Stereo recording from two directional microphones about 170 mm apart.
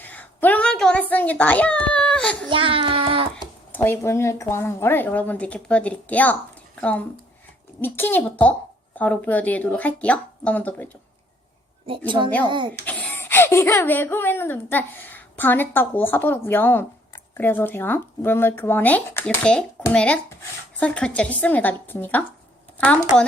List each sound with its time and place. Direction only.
0.0 s a sound: 10° left (ahead or behind)
1.1 s a child's voice: 10° left (ahead or behind)
2.5 s a child's voice: 30° right (ahead or behind)
3.3 s speech: 10° left (ahead or behind)
7.8 s speech: 10° left (ahead or behind)
11.9 s a woman's voice: 30° right (ahead or behind)
12.8 s a child's voice: 10° left (ahead or behind)